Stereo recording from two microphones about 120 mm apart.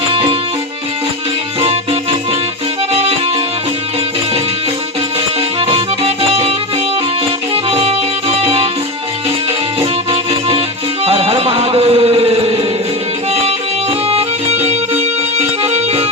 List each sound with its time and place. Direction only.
0.1 s music: 45° right (ahead or behind)
1.6 s music: 55° right (ahead or behind)
5.5 s music: 45° right (ahead or behind)
7.5 s music: 55° right (ahead or behind)
11.0 s music: 55° right (ahead or behind)
14.1 s music: 60° right (ahead or behind)